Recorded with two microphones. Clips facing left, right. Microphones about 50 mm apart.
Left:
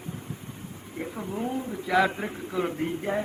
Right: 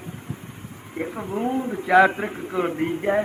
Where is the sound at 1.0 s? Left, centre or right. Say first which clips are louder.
Right 5 dB; right.